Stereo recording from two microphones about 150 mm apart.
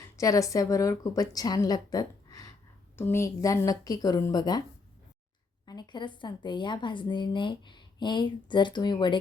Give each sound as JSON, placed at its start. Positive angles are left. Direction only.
{"t": 0.2, "sound": "a woman's voice", "side_deg": 20}
{"t": 5.6, "sound": "a woman's voice", "side_deg": 30}